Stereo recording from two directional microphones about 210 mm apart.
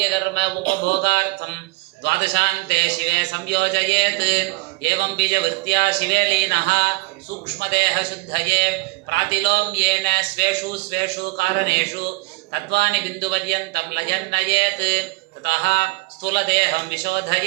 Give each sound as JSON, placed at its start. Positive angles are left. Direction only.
{"t": 0.0, "sound": "a man's voice", "side_deg": -55}